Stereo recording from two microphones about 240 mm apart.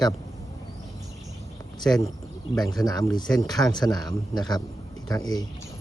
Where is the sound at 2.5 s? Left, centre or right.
Centre.